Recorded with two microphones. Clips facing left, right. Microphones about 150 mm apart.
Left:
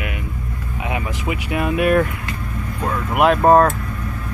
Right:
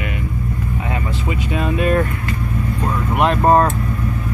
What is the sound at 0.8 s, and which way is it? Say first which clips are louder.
Speech: left 4 dB; 15° left (ahead or behind).